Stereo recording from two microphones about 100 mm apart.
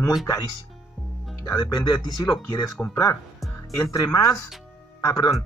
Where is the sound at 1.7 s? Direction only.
45° left (ahead or behind).